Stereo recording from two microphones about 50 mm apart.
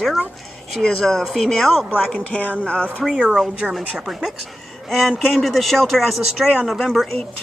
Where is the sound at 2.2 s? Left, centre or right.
Left.